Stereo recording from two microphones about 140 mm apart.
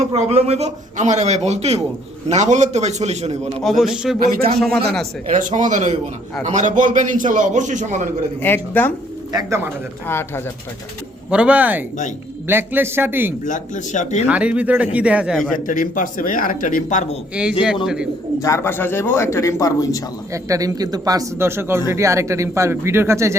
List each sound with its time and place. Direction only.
0.1 s a man's voice: 45° right (ahead or behind)
3.6 s a man's voice: centre (ahead or behind)
5.4 s a man's voice: 65° right (ahead or behind)
8.4 s speech: 15° left (ahead or behind)
9.3 s speech: 20° right (ahead or behind)
10.1 s speech: 15° left (ahead or behind)
11.3 s a man's voice: 10° right (ahead or behind)
13.4 s speech: 65° left (ahead or behind)
14.3 s a man's voice: 10° right (ahead or behind)
15.6 s speech: 70° left (ahead or behind)
17.4 s a man's voice: 5° right (ahead or behind)
18.3 s a man's voice: 20° left (ahead or behind)
20.3 s speech: 25° right (ahead or behind)